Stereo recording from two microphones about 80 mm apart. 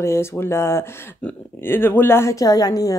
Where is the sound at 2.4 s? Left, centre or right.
Left.